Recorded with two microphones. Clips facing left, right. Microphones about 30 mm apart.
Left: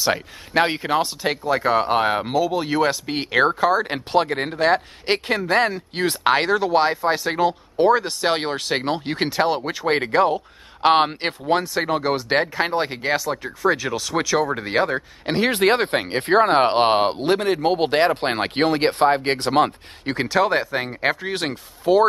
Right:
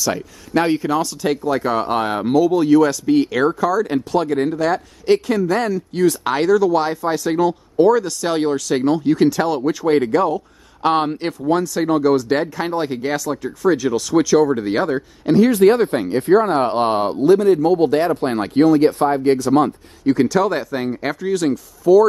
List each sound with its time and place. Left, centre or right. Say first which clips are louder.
0.0 s speech: even; left
1.4 s speech: left 3 dB; centre
2.7 s speech: right 7 dB; left
15.2 s speech: right 6 dB; left
20.2 s speech: left 1 dB; left